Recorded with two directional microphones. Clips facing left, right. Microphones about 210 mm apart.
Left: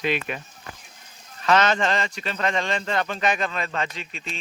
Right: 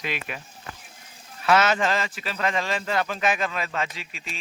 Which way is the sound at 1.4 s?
5° right (ahead or behind).